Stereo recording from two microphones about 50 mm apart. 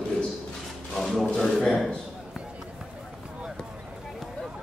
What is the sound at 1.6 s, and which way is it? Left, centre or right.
Speech, centre.